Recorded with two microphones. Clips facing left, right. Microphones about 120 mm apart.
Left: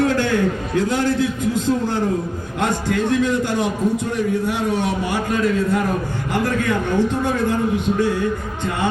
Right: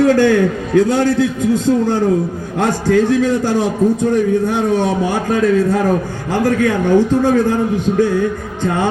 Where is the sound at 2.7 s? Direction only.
35° right (ahead or behind).